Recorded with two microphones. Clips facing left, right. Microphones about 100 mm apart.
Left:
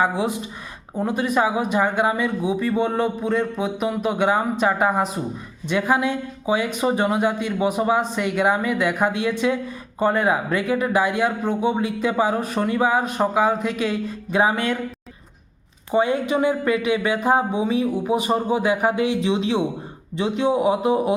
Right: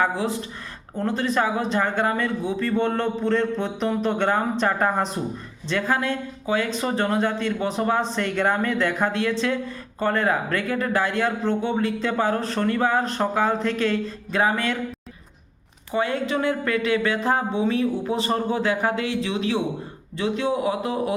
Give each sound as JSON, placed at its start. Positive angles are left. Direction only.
{"t": 0.0, "sound": "speech", "side_deg": 15}
{"t": 15.9, "sound": "a man's voice", "side_deg": 15}